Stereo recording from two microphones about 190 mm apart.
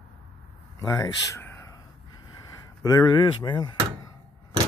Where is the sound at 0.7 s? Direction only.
15° left (ahead or behind).